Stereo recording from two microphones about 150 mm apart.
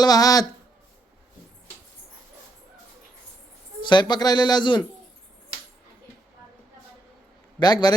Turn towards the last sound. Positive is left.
turn(degrees=25)  # may be behind; listen again after turning